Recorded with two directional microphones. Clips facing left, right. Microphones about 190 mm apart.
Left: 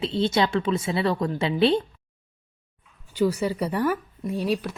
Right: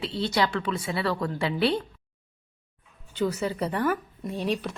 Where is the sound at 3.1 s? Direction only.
10° left (ahead or behind).